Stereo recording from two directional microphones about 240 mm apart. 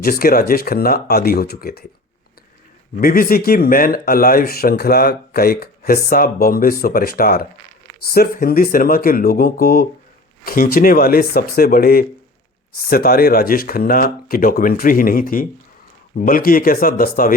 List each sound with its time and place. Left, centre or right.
0.0 s speech: left
2.9 s speech: left